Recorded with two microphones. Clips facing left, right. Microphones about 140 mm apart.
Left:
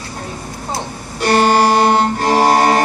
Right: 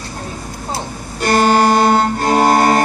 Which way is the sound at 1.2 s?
45° right (ahead or behind).